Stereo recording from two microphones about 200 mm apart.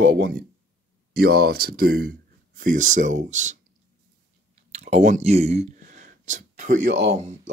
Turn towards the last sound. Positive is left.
turn(degrees=-35)  # may be behind; listen again after turning